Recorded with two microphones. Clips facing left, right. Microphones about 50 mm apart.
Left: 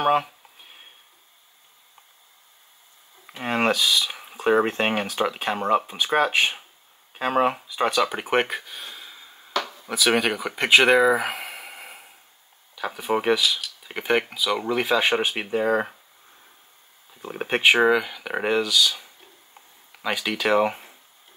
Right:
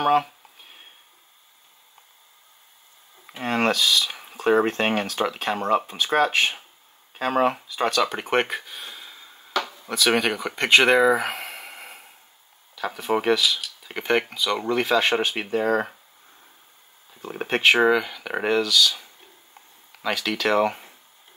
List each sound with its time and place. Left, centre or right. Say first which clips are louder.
0.0 s a sound: right 1 dB; centre
3.4 s speech: even; centre
17.2 s speech: even; centre